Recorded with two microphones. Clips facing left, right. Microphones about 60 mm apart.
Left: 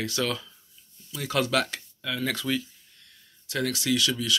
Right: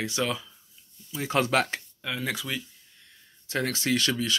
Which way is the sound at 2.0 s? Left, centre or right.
Centre.